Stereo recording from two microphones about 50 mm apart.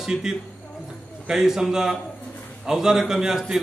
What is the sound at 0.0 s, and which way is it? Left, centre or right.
A man's voice, centre.